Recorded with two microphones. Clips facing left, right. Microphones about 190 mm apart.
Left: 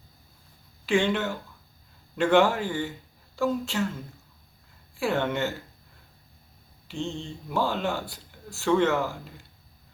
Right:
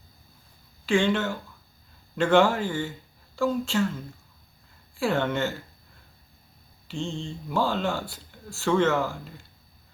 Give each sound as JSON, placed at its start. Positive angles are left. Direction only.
{"t": 0.9, "sound": "speech", "side_deg": 15}
{"t": 4.9, "sound": "speech", "side_deg": 15}
{"t": 6.8, "sound": "mantra", "side_deg": 20}
{"t": 7.5, "sound": "speech", "side_deg": 15}